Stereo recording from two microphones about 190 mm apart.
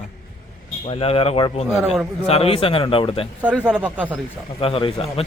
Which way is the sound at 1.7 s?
Centre (ahead or behind).